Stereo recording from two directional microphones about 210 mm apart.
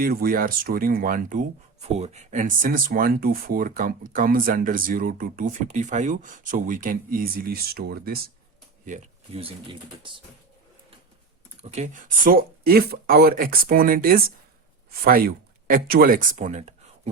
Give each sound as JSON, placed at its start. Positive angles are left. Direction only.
{"t": 0.0, "sound": "speech", "side_deg": -45}
{"t": 8.8, "sound": "speech", "side_deg": -30}
{"t": 11.6, "sound": "speech", "side_deg": -35}